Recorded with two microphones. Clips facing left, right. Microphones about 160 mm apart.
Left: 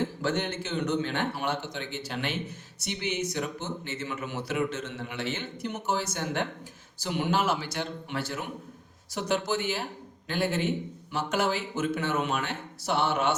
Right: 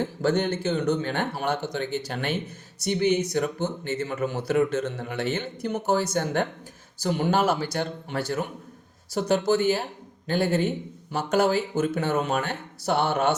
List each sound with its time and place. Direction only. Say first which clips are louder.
0.2 s speech: right 6 dB; 40° right (ahead or behind)